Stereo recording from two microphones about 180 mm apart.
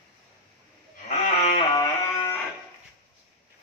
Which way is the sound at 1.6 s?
20° left (ahead or behind).